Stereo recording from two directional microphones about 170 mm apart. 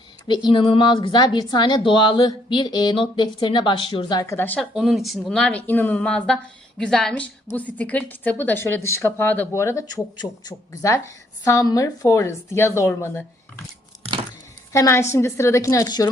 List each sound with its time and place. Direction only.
0.3 s a woman's voice: 30° left (ahead or behind)
4.2 s speech: 15° left (ahead or behind)
4.7 s speech: centre (ahead or behind); by 13.7 s 15° left (ahead or behind)
14.7 s speech: 15° left (ahead or behind)